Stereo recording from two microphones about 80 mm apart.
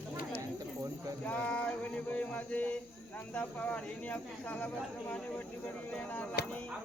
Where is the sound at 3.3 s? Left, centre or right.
Centre.